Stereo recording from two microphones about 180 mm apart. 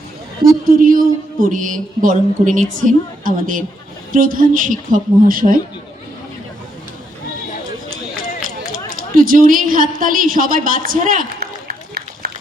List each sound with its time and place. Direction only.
0.6 s speech: 50° right (ahead or behind)
9.2 s a woman's voice: 50° right (ahead or behind)